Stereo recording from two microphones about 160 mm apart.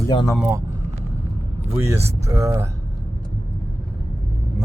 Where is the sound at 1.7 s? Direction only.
15° right (ahead or behind).